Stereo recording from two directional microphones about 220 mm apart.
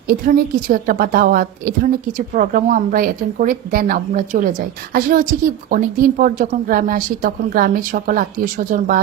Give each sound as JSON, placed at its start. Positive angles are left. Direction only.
{"t": 0.1, "sound": "a woman's voice", "side_deg": -40}